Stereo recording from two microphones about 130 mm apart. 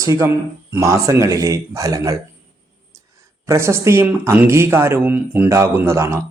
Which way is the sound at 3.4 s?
20° right (ahead or behind).